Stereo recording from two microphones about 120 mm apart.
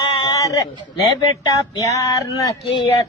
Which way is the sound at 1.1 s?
35° left (ahead or behind).